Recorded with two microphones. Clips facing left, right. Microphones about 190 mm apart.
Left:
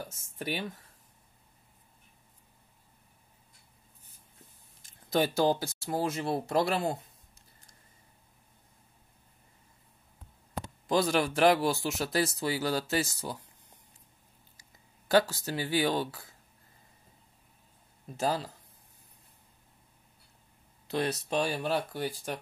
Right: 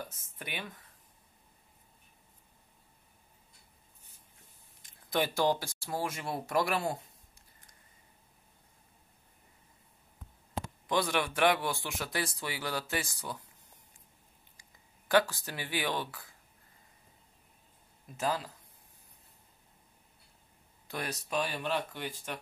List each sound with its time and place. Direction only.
0.4 s speech: 30° left (ahead or behind)
5.0 s speech: 25° left (ahead or behind)
10.9 s speech: 25° left (ahead or behind)
11.1 s speech: 40° left (ahead or behind)
15.0 s speech: 25° left (ahead or behind)
18.0 s speech: 30° left (ahead or behind)
20.8 s speech: 25° left (ahead or behind)